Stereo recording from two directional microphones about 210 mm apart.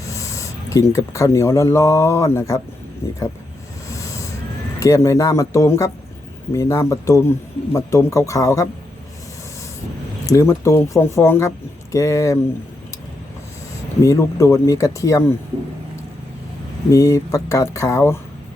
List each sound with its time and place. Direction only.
0.1 s speech: 15° left (ahead or behind)
3.8 s a sound: 15° left (ahead or behind)
4.8 s a man's voice: 15° left (ahead or behind)
10.2 s a man's voice: 15° left (ahead or behind)
14.0 s a man's voice: 15° left (ahead or behind)
16.9 s a man's voice: 15° left (ahead or behind)